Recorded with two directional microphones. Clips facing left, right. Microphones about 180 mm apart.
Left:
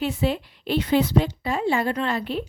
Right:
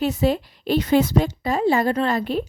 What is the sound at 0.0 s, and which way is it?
Speech, 40° right (ahead or behind).